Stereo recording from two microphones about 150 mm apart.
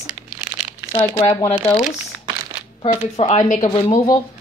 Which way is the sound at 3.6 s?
30° left (ahead or behind).